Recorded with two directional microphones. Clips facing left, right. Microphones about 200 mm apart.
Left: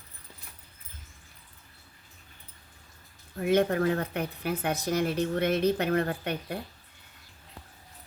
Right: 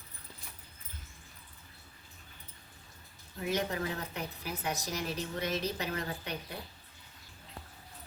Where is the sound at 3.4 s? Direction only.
55° left (ahead or behind).